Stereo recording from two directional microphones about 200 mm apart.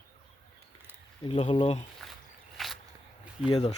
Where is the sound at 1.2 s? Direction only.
25° left (ahead or behind).